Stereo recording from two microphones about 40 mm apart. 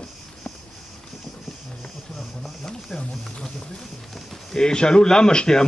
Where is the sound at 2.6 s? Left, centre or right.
Centre.